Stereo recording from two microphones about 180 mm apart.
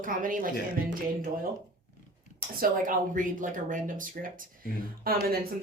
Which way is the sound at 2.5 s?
50° right (ahead or behind).